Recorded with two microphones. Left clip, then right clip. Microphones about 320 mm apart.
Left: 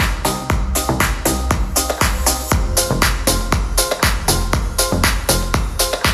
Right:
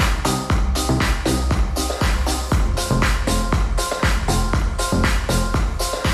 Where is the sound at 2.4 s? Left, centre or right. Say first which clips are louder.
Left 5 dB; left.